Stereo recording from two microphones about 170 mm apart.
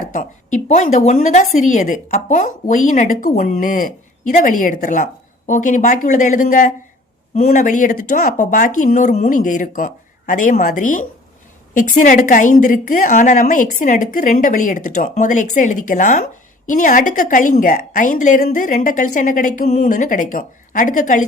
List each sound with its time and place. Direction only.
0.1 s a woman's voice: 50° left (ahead or behind)